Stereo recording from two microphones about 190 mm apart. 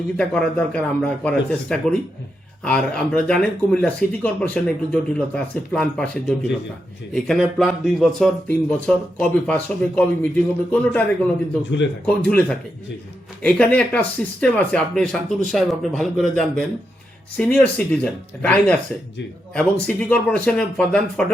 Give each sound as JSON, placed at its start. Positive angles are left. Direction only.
{"t": 0.2, "sound": "speech", "side_deg": 5}